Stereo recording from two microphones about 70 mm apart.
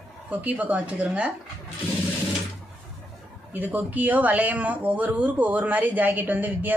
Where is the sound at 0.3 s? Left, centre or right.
Right.